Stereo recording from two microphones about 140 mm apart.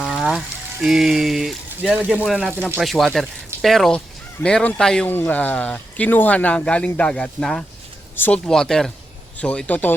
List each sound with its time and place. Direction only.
0.0 s speech: centre (ahead or behind)